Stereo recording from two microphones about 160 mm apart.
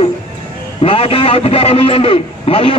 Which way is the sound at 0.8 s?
35° left (ahead or behind).